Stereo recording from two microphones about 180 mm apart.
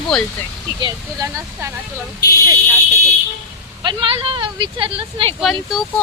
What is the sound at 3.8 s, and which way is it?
Speech, 25° right (ahead or behind).